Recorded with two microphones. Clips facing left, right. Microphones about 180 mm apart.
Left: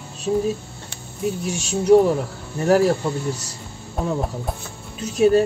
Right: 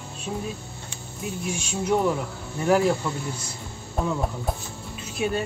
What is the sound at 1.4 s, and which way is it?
Speech, 35° left (ahead or behind).